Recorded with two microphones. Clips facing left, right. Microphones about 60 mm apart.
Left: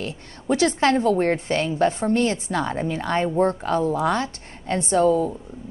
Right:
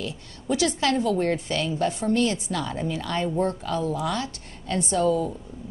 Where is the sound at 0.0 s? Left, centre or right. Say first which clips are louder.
Left 2 dB; left.